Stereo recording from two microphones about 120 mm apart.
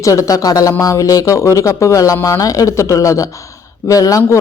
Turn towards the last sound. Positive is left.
turn(degrees=30)  # may be behind; listen again after turning